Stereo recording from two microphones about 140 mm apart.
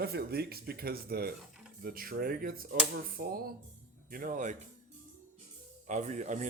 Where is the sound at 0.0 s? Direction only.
90° right.